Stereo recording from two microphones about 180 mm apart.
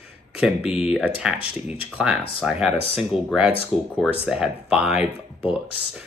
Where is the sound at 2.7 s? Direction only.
30° left (ahead or behind).